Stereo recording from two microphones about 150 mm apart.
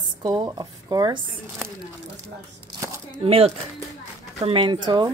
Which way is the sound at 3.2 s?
40° right (ahead or behind).